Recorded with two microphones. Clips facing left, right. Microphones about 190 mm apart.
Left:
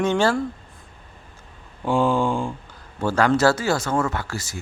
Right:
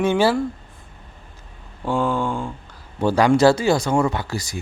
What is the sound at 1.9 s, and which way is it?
Mantra, 15° left (ahead or behind).